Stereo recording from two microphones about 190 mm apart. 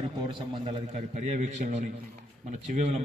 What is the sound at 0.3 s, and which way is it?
A man's voice, 30° right (ahead or behind).